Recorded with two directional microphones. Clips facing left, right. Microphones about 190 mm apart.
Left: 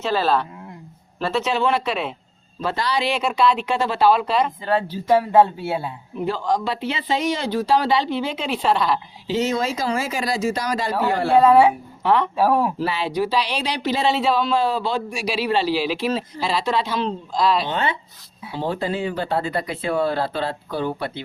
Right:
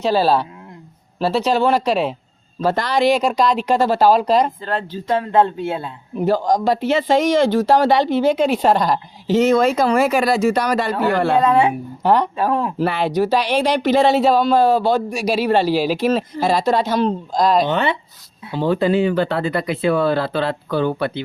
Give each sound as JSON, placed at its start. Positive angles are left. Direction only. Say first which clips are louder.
{"t": 1.2, "sound": "speech", "louder": "right 4 dB", "side_deg": -35}
{"t": 4.6, "sound": "speech", "louder": "left 2 dB", "side_deg": 10}
{"t": 6.2, "sound": "a woman's voice", "louder": "right 6 dB", "side_deg": -40}
{"t": 12.0, "sound": "speech", "louder": "right 3 dB", "side_deg": -40}
{"t": 12.4, "sound": "speech", "louder": "left 1 dB", "side_deg": 5}
{"t": 12.8, "sound": "speech", "louder": "right 5 dB", "side_deg": -55}
{"t": 18.5, "sound": "speech", "louder": "right 7 dB", "side_deg": -70}